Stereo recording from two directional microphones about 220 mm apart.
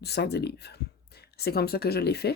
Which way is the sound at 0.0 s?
50° left (ahead or behind).